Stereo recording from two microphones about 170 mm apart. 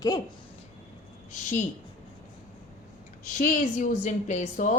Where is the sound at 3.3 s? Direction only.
45° left (ahead or behind).